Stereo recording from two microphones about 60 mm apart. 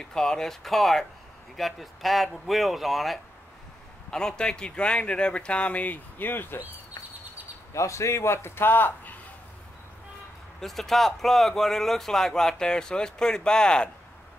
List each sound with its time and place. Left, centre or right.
0.0 s speech: centre
4.1 s speech: centre; by 6.6 s left
7.7 s a man's voice: left
10.6 s speech: centre